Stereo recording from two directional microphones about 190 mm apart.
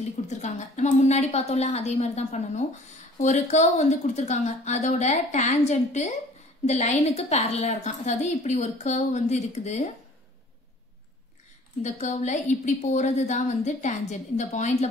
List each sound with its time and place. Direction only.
0.3 s a woman's voice: 40° left (ahead or behind)
11.8 s a woman's voice: 40° left (ahead or behind)